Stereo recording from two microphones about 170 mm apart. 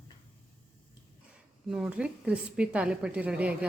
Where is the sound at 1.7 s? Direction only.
5° right (ahead or behind).